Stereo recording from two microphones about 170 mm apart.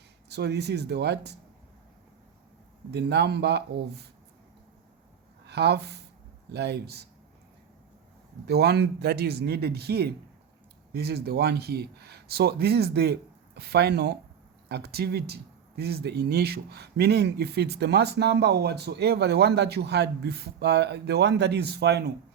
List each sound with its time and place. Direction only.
0.3 s speech: 75° right (ahead or behind)
2.9 s speech: 80° right
5.5 s speech: 75° right (ahead or behind)
8.4 s speech: 75° right (ahead or behind)